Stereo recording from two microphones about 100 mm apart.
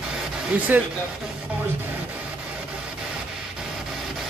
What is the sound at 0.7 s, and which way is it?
Speech, 15° right (ahead or behind).